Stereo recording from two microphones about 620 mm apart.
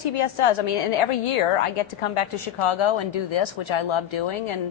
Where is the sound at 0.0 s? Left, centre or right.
Left.